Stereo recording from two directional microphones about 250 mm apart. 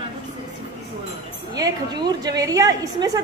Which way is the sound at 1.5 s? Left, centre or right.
Centre.